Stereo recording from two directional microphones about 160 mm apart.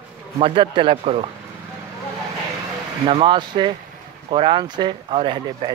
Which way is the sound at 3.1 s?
30° right (ahead or behind).